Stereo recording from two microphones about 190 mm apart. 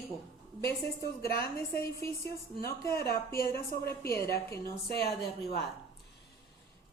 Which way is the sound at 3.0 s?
55° left (ahead or behind).